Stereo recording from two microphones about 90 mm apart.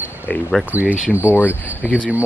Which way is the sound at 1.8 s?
15° left (ahead or behind).